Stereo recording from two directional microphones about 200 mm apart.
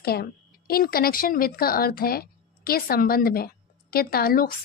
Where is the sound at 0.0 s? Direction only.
50° left (ahead or behind).